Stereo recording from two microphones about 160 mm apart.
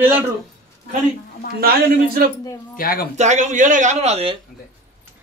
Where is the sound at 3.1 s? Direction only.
45° right (ahead or behind).